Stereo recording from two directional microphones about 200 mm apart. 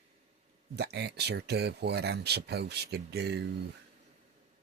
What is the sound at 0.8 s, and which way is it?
Speech, 55° right (ahead or behind).